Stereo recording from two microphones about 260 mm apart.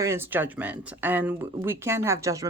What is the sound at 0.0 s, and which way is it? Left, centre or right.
Speech, centre.